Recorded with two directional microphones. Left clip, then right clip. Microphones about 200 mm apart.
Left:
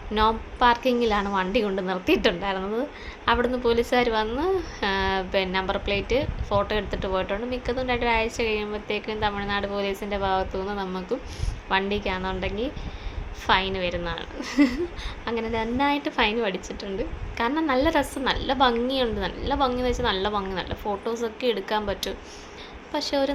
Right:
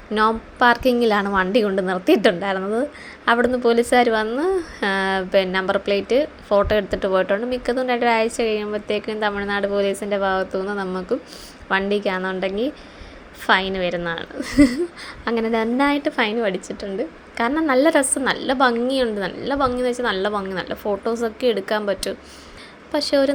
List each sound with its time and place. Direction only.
0.1 s a woman's voice: 20° right (ahead or behind)